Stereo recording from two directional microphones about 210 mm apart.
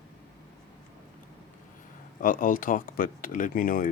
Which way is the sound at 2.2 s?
40° left (ahead or behind).